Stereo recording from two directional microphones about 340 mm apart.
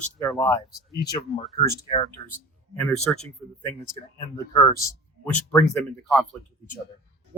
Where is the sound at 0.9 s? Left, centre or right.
Left.